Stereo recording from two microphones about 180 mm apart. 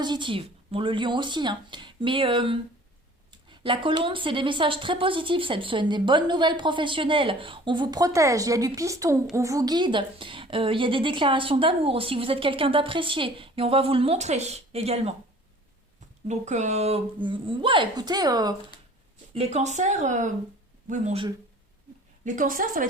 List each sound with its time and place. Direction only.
0.0 s a woman's voice: 25° right (ahead or behind)
16.2 s a woman's voice: 40° right (ahead or behind); by 18.5 s 20° right (ahead or behind)
19.3 s speech: 35° right (ahead or behind)
22.2 s a woman's voice: 50° right (ahead or behind)